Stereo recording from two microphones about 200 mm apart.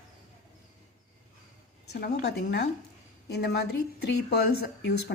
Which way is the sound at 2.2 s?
55° left (ahead or behind).